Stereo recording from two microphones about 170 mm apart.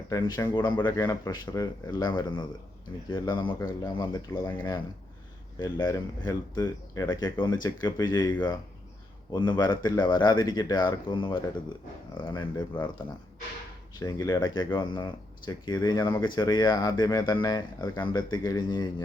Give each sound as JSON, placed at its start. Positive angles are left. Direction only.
{"t": 0.1, "sound": "speech", "side_deg": 20}
{"t": 5.5, "sound": "speech", "side_deg": 25}
{"t": 14.0, "sound": "speech", "side_deg": 25}